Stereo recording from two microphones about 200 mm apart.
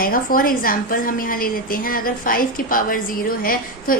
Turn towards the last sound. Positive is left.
turn(degrees=45)  # may be behind; listen again after turning